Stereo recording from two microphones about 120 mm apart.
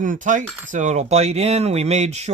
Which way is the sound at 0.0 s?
90° right.